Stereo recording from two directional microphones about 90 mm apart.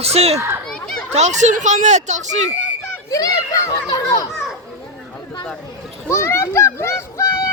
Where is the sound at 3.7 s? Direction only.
45° left (ahead or behind).